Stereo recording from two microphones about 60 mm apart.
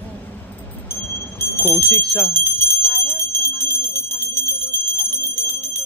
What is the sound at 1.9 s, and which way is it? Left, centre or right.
Clock, left.